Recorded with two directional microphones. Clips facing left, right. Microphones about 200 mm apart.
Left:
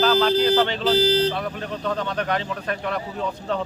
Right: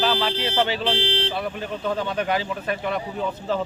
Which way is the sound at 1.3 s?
5° right (ahead or behind).